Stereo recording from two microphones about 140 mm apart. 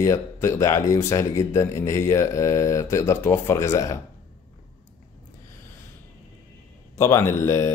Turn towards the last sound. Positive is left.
turn(degrees=20)  # may be behind; listen again after turning